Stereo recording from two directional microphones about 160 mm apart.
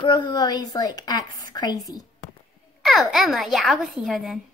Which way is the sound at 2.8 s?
Centre (ahead or behind).